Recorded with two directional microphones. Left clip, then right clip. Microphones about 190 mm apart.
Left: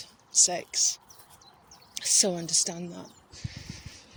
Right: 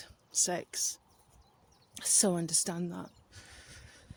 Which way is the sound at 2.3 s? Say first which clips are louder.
Left 5 dB; 55° right (ahead or behind).